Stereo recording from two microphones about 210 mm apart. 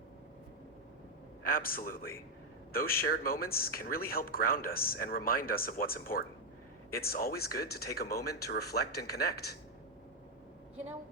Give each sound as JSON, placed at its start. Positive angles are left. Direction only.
{"t": 1.5, "sound": "speech", "side_deg": 45}